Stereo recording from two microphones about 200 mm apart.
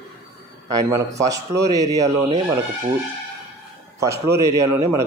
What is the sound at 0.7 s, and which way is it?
Speech, 15° right (ahead or behind).